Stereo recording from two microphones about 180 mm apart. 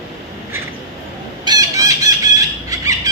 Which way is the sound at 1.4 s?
20° right (ahead or behind).